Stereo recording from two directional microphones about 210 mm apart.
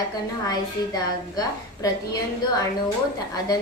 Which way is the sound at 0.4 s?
20° left (ahead or behind).